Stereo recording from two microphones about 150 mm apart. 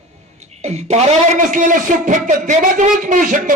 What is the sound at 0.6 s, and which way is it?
A man's voice, 45° right (ahead or behind).